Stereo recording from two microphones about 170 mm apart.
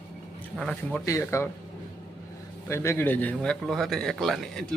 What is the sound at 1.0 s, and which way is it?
Speech, 15° left (ahead or behind).